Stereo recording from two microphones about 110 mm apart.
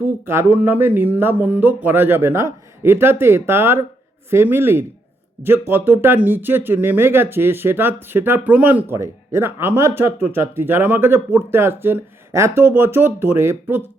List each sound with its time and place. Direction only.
0.0 s speech: 20° right (ahead or behind)